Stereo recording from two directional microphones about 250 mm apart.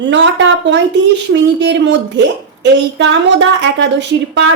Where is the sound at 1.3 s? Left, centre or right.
Right.